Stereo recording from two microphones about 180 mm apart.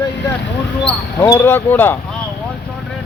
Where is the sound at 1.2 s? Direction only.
15° left (ahead or behind).